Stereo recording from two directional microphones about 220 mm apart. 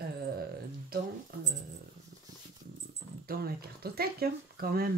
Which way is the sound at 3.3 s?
45° right (ahead or behind).